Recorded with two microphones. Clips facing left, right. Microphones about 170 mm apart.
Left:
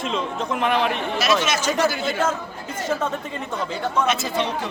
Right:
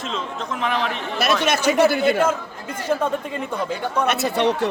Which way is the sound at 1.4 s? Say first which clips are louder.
Right 4 dB; 60° right (ahead or behind).